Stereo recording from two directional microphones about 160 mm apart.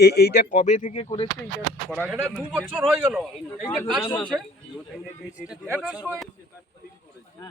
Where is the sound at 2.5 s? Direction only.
10° right (ahead or behind).